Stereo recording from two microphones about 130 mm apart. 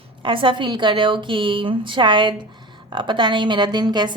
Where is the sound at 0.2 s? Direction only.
40° right (ahead or behind).